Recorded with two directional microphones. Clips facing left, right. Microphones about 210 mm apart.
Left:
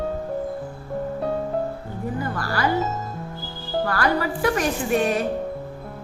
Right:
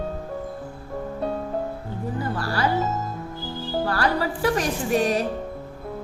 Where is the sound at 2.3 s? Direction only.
30° right (ahead or behind).